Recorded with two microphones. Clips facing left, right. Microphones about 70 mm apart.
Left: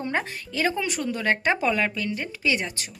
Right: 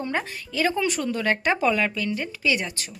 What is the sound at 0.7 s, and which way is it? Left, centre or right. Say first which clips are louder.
Speech: right 3 dB; centre.